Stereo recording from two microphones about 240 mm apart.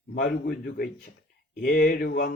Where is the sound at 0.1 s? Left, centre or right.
Left.